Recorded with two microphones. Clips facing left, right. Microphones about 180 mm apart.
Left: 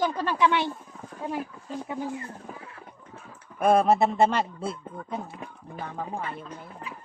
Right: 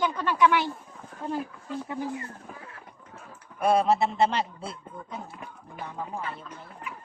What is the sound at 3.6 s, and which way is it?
Speech, 50° left (ahead or behind).